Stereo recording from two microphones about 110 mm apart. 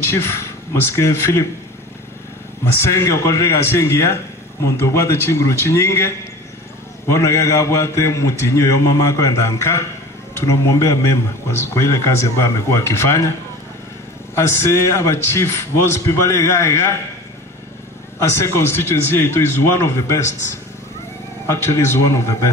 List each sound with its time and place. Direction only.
0.9 s speech: 25° left (ahead or behind)
2.8 s speech: 25° left (ahead or behind)
14.3 s speech: 25° left (ahead or behind)
18.4 s speech: 25° left (ahead or behind)
21.5 s speech: 25° left (ahead or behind)